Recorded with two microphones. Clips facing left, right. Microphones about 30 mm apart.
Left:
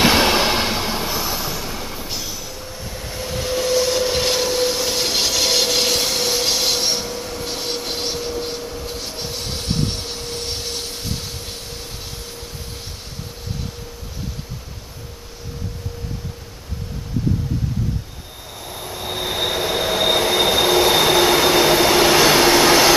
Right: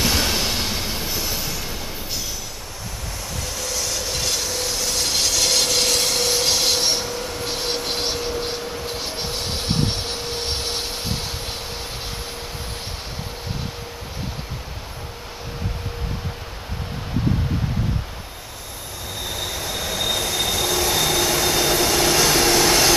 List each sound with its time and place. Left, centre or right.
0.0 s vehicle: left; by 2.2 s centre
3.2 s train: left; by 11.1 s centre
19.0 s train: left